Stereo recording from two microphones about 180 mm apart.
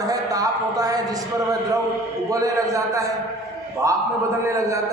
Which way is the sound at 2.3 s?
20° right (ahead or behind).